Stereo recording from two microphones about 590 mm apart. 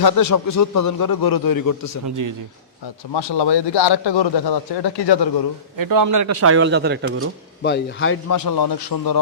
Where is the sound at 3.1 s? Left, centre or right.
Left.